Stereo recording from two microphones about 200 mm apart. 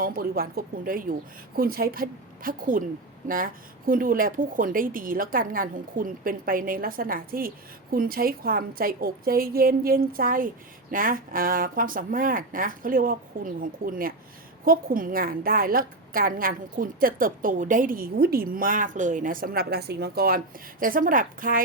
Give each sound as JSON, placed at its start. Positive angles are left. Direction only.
{"t": 0.0, "sound": "a woman's voice", "side_deg": -50}